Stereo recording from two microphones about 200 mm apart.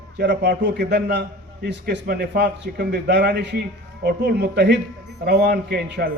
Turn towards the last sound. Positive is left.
turn(degrees=-50)  # may be behind; listen again after turning